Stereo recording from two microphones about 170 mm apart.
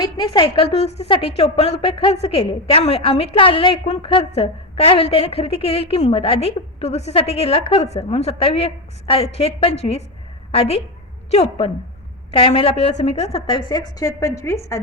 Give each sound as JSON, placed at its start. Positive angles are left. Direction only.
{"t": 0.0, "sound": "a woman's voice", "side_deg": 30}